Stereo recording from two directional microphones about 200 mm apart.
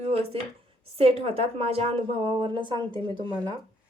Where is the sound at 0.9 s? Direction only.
30° right (ahead or behind).